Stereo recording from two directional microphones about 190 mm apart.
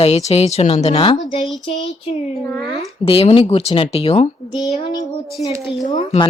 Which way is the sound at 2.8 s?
30° left (ahead or behind).